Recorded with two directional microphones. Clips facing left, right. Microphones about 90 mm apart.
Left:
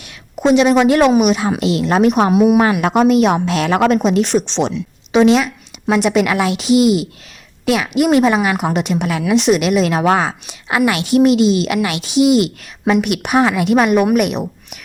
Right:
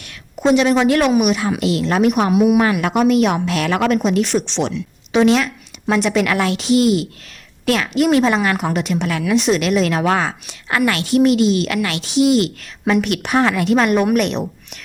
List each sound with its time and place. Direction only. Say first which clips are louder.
0.3 s a woman's voice: left 3 dB; 20° left (ahead or behind)